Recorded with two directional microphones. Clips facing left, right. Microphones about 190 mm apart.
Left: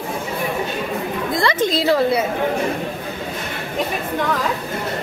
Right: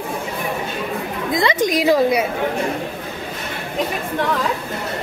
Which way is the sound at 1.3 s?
20° right (ahead or behind).